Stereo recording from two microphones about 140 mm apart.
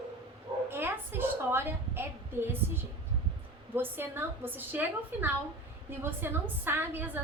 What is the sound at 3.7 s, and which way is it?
A woman's voice, 15° right (ahead or behind).